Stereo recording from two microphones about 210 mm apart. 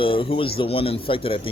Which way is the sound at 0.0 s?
25° left (ahead or behind).